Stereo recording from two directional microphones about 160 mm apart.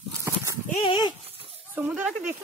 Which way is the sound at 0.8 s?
30° left (ahead or behind).